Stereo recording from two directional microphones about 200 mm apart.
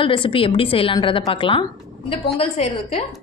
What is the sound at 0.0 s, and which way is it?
A woman's voice, 25° left (ahead or behind).